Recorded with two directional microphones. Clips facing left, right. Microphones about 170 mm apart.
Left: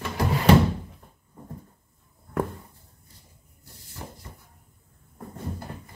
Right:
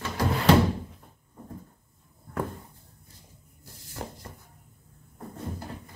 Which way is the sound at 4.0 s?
65° right (ahead or behind).